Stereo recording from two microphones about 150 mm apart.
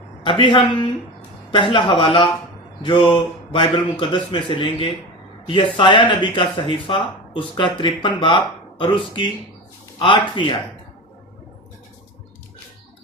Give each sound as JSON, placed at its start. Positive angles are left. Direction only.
{"t": 0.3, "sound": "speech", "side_deg": 30}